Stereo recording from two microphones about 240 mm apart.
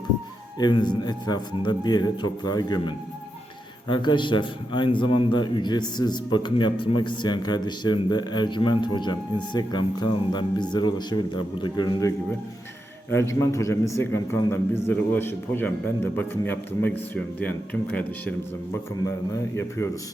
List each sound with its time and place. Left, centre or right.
0.6 s a man's voice: centre